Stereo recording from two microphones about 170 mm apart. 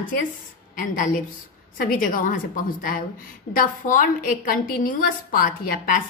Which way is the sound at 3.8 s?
55° left (ahead or behind).